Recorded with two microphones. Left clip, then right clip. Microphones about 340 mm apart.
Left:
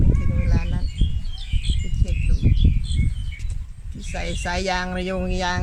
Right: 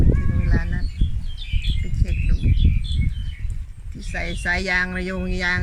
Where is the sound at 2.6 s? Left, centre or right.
Left.